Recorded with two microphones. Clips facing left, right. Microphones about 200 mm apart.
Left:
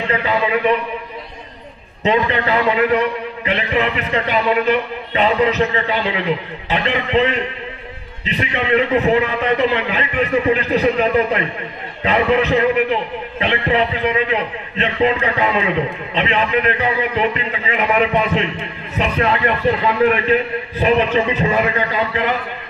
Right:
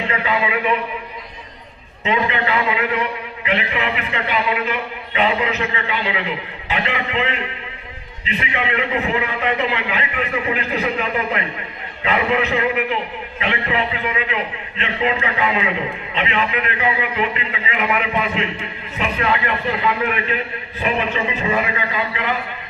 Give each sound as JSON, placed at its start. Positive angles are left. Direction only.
{"t": 0.1, "sound": "a man's voice", "side_deg": 35}
{"t": 2.0, "sound": "a man's voice", "side_deg": 40}
{"t": 8.3, "sound": "a man's voice", "side_deg": 35}
{"t": 20.8, "sound": "a man's voice", "side_deg": 40}